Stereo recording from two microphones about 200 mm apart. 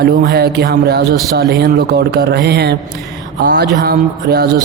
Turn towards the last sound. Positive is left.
turn(degrees=-50)  # may be behind; listen again after turning